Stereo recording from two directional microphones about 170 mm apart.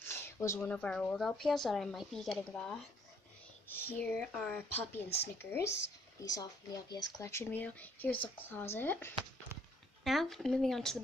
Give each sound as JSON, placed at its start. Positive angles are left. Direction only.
{"t": 0.1, "sound": "speech", "side_deg": 15}
{"t": 10.0, "sound": "speech", "side_deg": 0}